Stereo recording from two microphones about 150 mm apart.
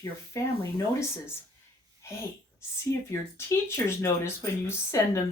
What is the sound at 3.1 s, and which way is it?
Speech, 20° left (ahead or behind).